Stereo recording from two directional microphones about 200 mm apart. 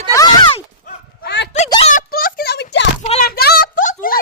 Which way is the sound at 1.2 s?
60° left (ahead or behind).